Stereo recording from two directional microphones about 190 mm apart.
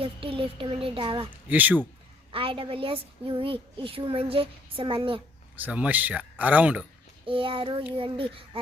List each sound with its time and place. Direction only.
0.0 s speech: 30° right (ahead or behind)
1.5 s speech: 10° right (ahead or behind)
2.3 s speech: 30° right (ahead or behind)
5.5 s speech: 10° right (ahead or behind)
7.3 s speech: 30° right (ahead or behind)